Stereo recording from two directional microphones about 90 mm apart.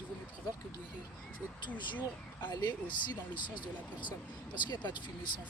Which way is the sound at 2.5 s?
55° left (ahead or behind).